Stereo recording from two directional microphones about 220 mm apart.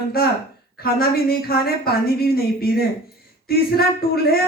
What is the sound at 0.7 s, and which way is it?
Speech, 45° left (ahead or behind).